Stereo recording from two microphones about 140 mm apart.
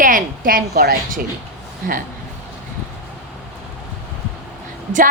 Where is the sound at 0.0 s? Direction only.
80° right.